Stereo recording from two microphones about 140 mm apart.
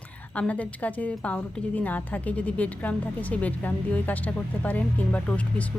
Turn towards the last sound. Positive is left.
turn(degrees=10)  # may be behind; listen again after turning